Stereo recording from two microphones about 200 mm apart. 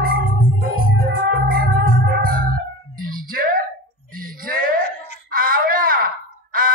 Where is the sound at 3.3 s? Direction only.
45° right (ahead or behind).